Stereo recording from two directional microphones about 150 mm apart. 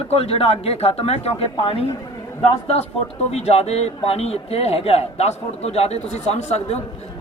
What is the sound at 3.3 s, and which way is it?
Speech, 45° left (ahead or behind).